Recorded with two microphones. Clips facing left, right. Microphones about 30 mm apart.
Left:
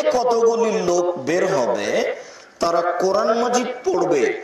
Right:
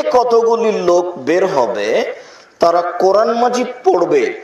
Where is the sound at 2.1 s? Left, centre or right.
Right.